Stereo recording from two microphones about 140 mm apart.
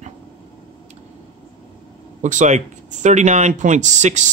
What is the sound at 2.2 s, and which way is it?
Speech, 60° right (ahead or behind).